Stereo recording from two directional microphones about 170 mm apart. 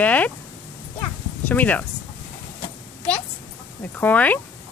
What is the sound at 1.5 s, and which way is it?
Speech, 10° left (ahead or behind).